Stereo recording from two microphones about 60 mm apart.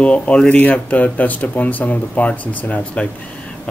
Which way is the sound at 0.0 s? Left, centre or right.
Left.